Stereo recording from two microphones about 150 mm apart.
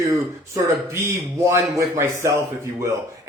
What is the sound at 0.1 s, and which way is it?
Speech, 20° right (ahead or behind).